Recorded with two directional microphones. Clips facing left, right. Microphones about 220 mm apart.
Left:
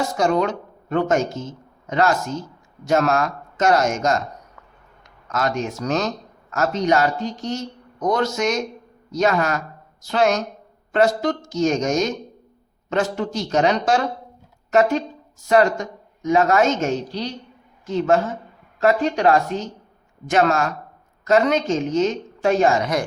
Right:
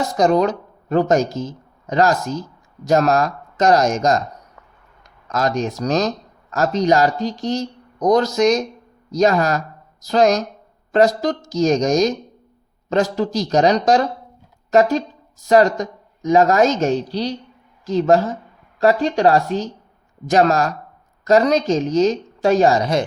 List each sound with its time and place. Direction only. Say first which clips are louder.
0.2 s speech: right 5 dB; 35° right (ahead or behind)
5.3 s a woman's voice: right 3 dB; 35° right (ahead or behind)